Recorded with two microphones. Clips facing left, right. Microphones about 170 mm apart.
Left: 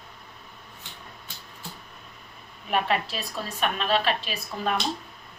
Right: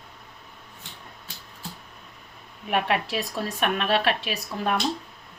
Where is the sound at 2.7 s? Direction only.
60° right (ahead or behind).